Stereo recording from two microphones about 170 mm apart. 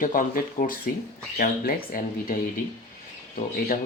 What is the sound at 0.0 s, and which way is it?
Speech, 55° left (ahead or behind).